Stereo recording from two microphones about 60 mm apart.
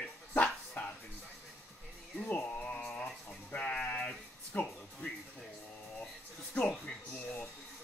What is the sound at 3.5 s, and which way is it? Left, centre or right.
Sheep, left.